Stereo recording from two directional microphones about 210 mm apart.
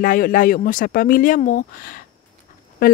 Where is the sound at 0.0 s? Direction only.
40° left (ahead or behind).